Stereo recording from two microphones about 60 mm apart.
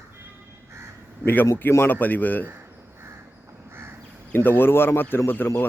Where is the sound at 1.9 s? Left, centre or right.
Left.